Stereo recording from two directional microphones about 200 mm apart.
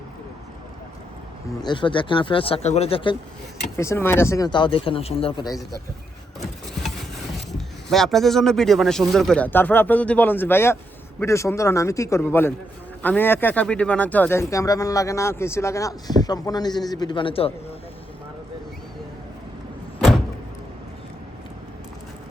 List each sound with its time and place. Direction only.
1.6 s speech: 25° left (ahead or behind)
3.8 s speech: 10° left (ahead or behind)
7.9 s a man's voice: centre (ahead or behind); by 17.5 s 25° left (ahead or behind)